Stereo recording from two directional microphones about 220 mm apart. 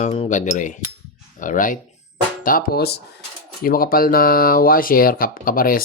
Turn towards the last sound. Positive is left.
turn(degrees=40)  # may be behind; listen again after turning